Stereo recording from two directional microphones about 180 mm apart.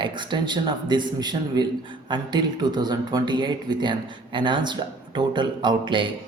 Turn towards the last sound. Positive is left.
turn(degrees=-25)  # may be behind; listen again after turning